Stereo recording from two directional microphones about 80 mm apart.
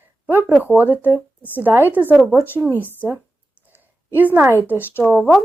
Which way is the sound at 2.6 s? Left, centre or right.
Right.